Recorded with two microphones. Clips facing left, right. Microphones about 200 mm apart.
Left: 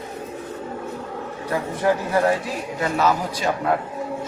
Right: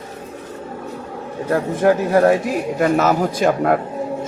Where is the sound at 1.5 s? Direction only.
45° right (ahead or behind).